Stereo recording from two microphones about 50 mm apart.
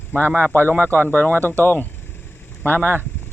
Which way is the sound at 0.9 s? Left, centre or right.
Left.